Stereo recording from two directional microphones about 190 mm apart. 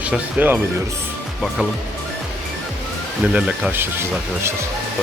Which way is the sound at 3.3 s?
10° right (ahead or behind).